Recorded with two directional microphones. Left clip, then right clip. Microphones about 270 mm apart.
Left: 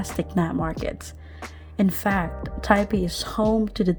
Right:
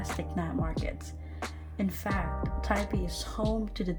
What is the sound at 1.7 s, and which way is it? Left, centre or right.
Speech, left.